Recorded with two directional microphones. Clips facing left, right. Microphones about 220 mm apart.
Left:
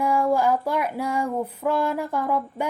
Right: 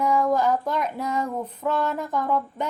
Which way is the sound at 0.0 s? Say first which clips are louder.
Even; 10° left (ahead or behind).